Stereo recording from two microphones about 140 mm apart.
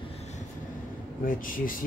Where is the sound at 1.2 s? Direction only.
80° left.